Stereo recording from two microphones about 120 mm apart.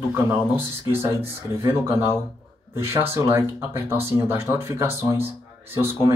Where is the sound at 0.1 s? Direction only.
20° right (ahead or behind).